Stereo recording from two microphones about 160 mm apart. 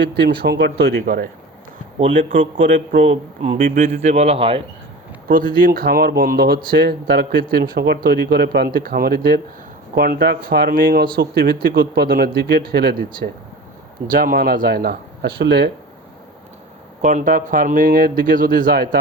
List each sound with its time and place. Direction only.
0.4 s speech: 90° right; by 1.3 s 60° right (ahead or behind)
2.0 s a man's voice: 50° right (ahead or behind)
3.6 s speech: 60° right (ahead or behind)
4.0 s speech: 45° right (ahead or behind)
5.3 s speech: 60° right (ahead or behind); by 13.2 s 80° right
14.1 s speech: 65° right (ahead or behind); by 15.7 s 90° right
17.0 s speech: 50° right (ahead or behind)